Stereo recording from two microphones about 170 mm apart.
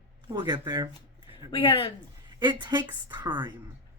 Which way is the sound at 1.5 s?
30° left (ahead or behind).